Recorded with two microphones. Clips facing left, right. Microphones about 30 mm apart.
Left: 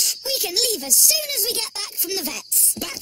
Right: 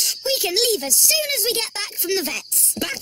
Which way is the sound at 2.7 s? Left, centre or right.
Right.